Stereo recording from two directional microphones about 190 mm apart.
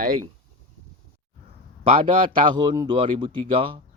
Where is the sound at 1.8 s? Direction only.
30° right (ahead or behind).